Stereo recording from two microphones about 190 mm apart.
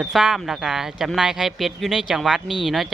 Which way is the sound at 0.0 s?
5° right (ahead or behind).